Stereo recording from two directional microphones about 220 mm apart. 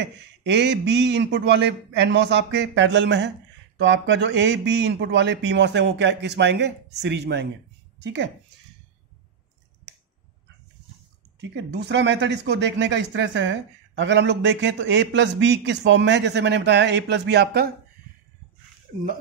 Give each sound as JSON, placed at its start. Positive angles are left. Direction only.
{"t": 0.0, "sound": "speech", "side_deg": -50}
{"t": 11.5, "sound": "speech", "side_deg": -50}